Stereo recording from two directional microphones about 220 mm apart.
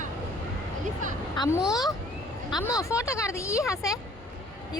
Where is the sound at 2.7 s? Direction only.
15° left (ahead or behind).